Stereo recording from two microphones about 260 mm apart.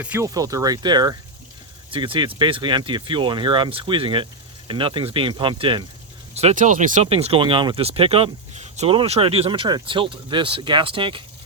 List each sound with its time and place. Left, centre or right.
0.0 s speech: centre